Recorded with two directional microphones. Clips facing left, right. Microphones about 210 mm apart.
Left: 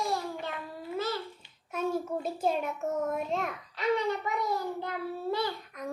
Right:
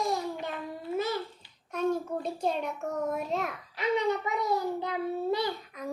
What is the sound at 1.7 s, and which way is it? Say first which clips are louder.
A child's voice: right 2 dB; 5° left (ahead or behind).